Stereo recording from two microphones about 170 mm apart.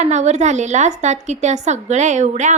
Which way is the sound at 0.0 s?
45° right (ahead or behind).